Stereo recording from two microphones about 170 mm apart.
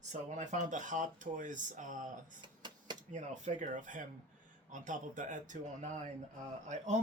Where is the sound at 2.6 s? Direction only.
25° right (ahead or behind).